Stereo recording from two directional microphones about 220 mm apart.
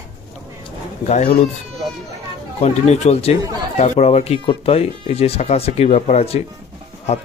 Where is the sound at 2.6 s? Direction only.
30° left (ahead or behind).